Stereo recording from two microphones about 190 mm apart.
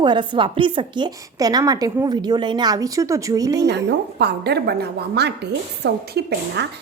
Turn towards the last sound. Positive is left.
turn(degrees=-60)  # may be behind; listen again after turning